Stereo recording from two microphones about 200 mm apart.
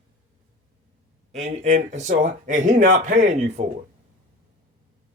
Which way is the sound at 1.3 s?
35° right (ahead or behind).